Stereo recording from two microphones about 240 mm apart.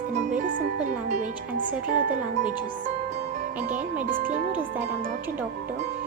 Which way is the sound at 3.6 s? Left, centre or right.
Centre.